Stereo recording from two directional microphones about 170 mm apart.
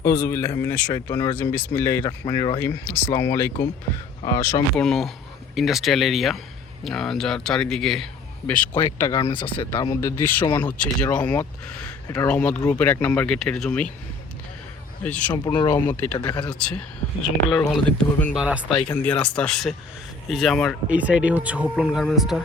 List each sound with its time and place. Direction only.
0.0 s speech: 15° left (ahead or behind)
4.7 s speech: 5° left (ahead or behind)
9.0 s speech: 20° left (ahead or behind)
9.2 s speech: 30° left (ahead or behind); by 13.8 s 5° left (ahead or behind)
15.0 s speech: 10° left (ahead or behind)
15.4 s speech: 20° left (ahead or behind)
16.1 s speech: 25° left (ahead or behind)
16.5 s speech: 5° left (ahead or behind)
18.8 s speech: 10° left (ahead or behind)
20.9 s speech: 10° right (ahead or behind)